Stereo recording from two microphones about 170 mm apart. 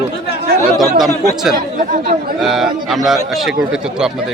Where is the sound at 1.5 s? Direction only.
50° right (ahead or behind).